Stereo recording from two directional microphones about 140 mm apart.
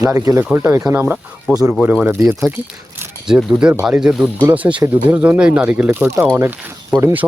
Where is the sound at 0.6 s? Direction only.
25° right (ahead or behind).